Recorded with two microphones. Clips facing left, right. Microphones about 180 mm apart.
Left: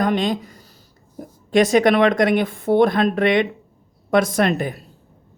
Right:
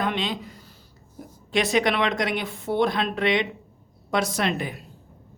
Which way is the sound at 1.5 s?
45° left (ahead or behind).